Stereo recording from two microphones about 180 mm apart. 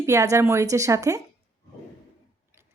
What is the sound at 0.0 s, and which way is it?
A woman's voice, 15° right (ahead or behind).